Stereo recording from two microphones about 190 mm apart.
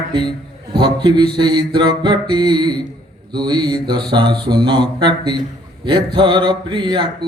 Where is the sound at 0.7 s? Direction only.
25° right (ahead or behind).